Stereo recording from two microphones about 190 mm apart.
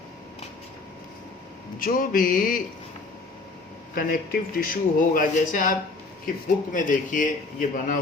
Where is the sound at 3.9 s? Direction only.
50° left (ahead or behind).